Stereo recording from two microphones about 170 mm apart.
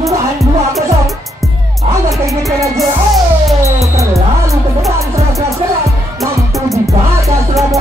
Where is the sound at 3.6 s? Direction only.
20° right (ahead or behind).